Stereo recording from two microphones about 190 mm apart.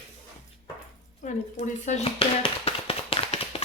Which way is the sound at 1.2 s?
40° left (ahead or behind).